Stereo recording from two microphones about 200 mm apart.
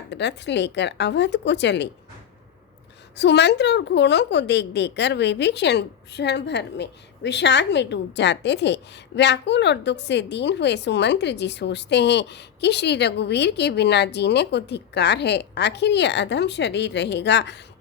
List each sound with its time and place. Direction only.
0.1 s a woman's voice: 60° left (ahead or behind)
3.2 s a woman's voice: 60° left (ahead or behind)